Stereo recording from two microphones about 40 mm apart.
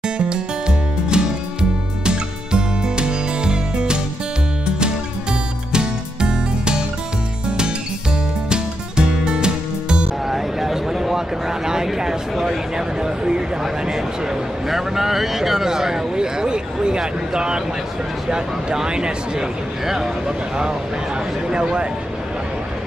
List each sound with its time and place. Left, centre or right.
0.3 s music: right
5.7 s music: right
8.5 s music: right
10.3 s a sound: centre
14.7 s a sound: centre
18.3 s speech: right